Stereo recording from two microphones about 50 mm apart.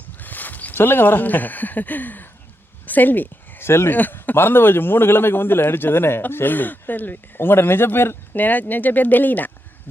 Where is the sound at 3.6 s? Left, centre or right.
Left.